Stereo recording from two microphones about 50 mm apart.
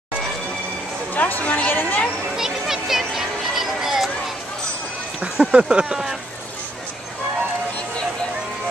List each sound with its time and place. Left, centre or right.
1.1 s speech: left
1.7 s speech: left
2.3 s a sound: centre
5.2 s speech: centre